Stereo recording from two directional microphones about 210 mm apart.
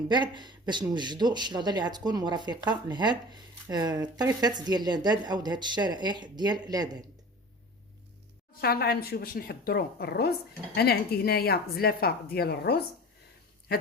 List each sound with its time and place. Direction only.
0.1 s speech: 20° right (ahead or behind)
8.6 s speech: 45° left (ahead or behind)